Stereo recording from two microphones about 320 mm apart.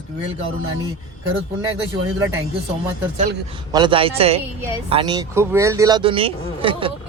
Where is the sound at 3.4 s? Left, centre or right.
Centre.